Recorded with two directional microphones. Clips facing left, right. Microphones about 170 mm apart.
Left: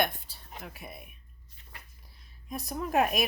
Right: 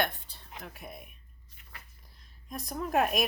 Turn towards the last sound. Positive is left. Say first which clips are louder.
# left 1 dB
turn(degrees=0)  # may be behind; listen again after turning